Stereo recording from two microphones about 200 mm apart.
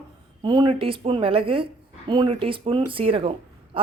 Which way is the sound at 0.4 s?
25° right (ahead or behind).